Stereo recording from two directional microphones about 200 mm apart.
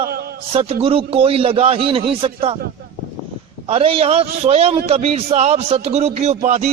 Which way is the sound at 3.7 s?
30° right (ahead or behind).